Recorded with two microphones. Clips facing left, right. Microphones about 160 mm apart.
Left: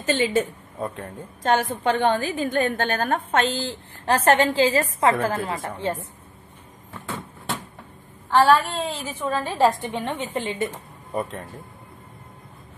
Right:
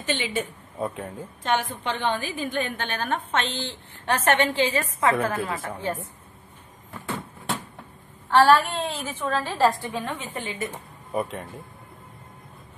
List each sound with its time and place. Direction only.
0.0 s a woman's voice: 40° left (ahead or behind)
0.7 s speech: 10° right (ahead or behind)
1.4 s a woman's voice: 40° left (ahead or behind)
6.9 s a sound: centre (ahead or behind)
8.3 s a woman's voice: centre (ahead or behind)
9.1 s a woman's voice: 10° left (ahead or behind)
10.4 s a woman's voice: 30° left (ahead or behind)
11.1 s a woman's voice: centre (ahead or behind)